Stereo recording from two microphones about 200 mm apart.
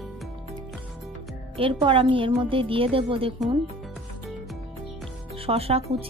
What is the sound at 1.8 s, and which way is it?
A woman's voice, 25° right (ahead or behind).